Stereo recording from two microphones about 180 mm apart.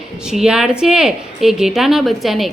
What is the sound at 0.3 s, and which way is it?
A woman's voice, 5° right (ahead or behind).